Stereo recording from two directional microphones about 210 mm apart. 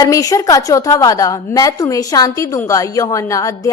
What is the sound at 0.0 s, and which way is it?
A woman's voice, 15° left (ahead or behind).